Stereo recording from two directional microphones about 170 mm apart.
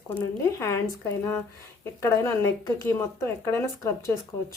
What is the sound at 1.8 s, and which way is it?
Speech, 15° left (ahead or behind).